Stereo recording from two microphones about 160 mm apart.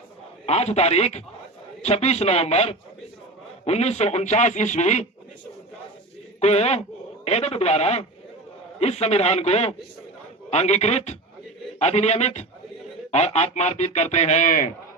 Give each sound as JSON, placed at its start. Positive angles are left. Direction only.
{"t": 0.4, "sound": "a man's voice", "side_deg": 40}
{"t": 6.4, "sound": "a man's voice", "side_deg": 40}